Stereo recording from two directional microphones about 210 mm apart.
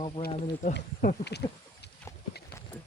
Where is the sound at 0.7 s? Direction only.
50° left (ahead or behind).